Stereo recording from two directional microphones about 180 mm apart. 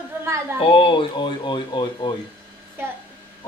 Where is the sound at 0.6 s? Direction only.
30° left (ahead or behind).